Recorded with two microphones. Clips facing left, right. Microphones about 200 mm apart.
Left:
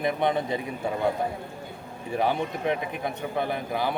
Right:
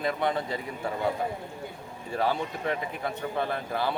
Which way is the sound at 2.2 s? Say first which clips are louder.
Left 2 dB; 20° left (ahead or behind).